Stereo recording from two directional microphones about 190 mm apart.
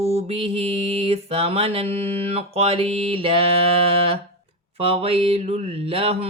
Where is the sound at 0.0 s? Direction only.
35° right (ahead or behind).